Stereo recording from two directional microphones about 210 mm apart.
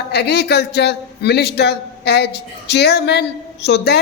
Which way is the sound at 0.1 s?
50° left (ahead or behind).